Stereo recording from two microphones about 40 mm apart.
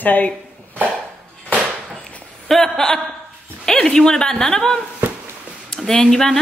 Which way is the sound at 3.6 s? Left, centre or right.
Centre.